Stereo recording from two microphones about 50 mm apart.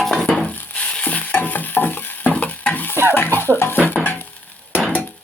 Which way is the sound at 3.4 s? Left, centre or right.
Left.